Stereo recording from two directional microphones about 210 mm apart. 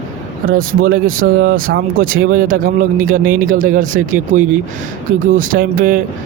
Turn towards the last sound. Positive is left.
turn(degrees=-40)  # may be behind; listen again after turning